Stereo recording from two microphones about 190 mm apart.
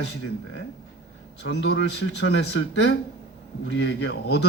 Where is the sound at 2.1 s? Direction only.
65° left (ahead or behind).